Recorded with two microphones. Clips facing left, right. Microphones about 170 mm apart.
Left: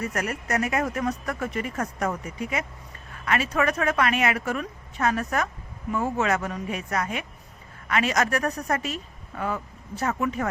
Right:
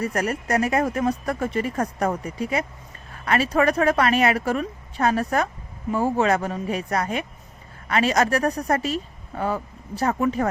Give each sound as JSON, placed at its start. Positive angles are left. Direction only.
{"t": 0.0, "sound": "a woman's voice", "side_deg": -35}